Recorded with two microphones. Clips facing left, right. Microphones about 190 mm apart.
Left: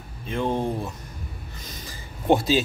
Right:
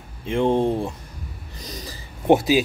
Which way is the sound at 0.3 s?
25° right (ahead or behind).